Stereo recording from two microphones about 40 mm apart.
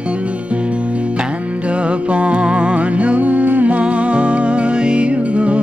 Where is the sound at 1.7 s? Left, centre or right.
Right.